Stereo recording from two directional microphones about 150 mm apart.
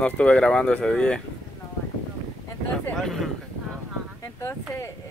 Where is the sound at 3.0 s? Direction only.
Centre (ahead or behind).